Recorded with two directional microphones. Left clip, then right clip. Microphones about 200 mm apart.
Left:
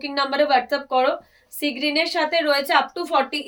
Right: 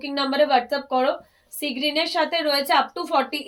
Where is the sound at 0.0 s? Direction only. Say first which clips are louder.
Even; 15° left (ahead or behind).